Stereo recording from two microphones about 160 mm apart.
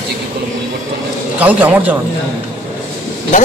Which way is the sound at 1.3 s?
10° right (ahead or behind).